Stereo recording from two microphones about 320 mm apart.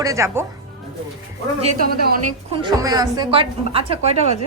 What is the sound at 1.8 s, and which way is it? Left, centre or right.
Speech, right.